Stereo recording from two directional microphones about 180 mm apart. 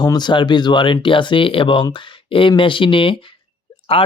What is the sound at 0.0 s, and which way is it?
Speech, 25° left (ahead or behind).